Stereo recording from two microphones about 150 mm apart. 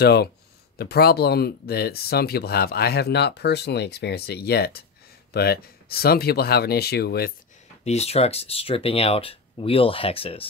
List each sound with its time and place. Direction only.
0.0 s speech: 90° left
7.8 s speech: 45° left (ahead or behind)